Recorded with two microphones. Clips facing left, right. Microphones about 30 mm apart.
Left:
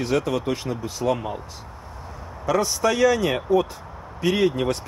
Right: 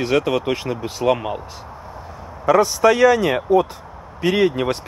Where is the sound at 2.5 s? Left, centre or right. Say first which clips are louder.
Right 7 dB; right.